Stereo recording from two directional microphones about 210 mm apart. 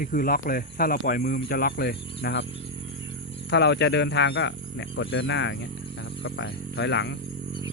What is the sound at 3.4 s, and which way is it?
Speech, 55° left (ahead or behind).